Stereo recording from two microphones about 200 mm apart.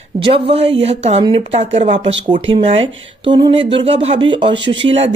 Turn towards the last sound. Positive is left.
turn(degrees=-30)  # may be behind; listen again after turning